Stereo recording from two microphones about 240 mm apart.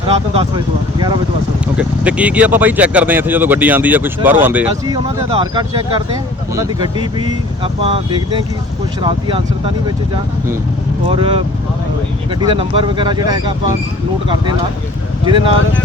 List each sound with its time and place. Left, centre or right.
0.1 s speech: right
1.7 s speech: centre; by 9.7 s right
11.1 s speech: right
15.2 s speech: right